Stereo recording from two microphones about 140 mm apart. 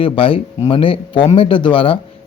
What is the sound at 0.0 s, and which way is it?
A man's voice, 40° left (ahead or behind).